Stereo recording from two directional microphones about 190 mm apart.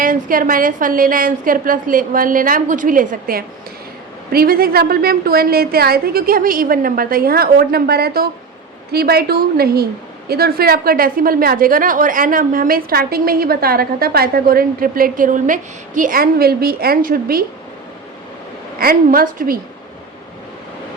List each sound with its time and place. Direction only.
0.0 s a woman's voice: 45° right (ahead or behind)
18.8 s a woman's voice: 50° right (ahead or behind)